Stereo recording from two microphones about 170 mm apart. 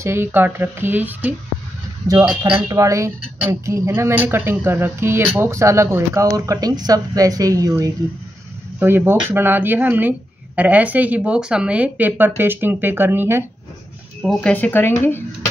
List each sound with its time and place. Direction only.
0.0 s speech: 15° right (ahead or behind)
2.7 s speech: 20° right (ahead or behind)
14.2 s speech: 5° left (ahead or behind)